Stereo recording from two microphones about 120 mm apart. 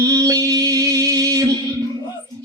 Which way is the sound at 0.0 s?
30° right (ahead or behind).